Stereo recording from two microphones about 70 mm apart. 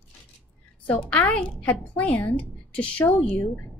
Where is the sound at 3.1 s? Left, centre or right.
Centre.